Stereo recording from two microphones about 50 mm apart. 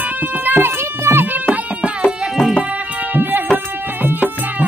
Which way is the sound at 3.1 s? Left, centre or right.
Right.